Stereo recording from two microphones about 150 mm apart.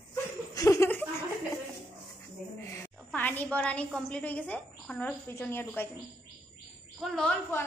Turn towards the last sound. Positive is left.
turn(degrees=5)  # may be behind; listen again after turning